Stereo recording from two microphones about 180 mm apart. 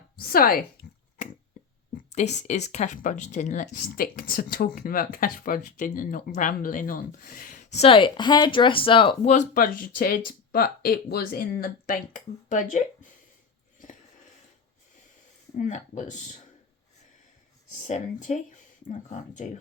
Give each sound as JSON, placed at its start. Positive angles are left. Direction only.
{"t": 0.2, "sound": "a sound", "side_deg": 55}
{"t": 2.0, "sound": "speech", "side_deg": 40}
{"t": 9.3, "sound": "speech", "side_deg": 45}
{"t": 15.5, "sound": "speech", "side_deg": 45}
{"t": 17.7, "sound": "speech", "side_deg": 40}